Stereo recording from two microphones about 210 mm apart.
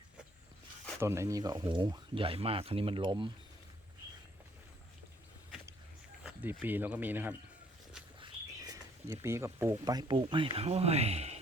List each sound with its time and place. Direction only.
0.9 s speech: 15° right (ahead or behind)
6.2 s speech: 10° right (ahead or behind); by 11.3 s 30° right (ahead or behind)